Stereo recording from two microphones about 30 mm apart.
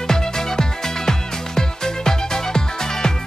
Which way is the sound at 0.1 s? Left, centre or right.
Centre.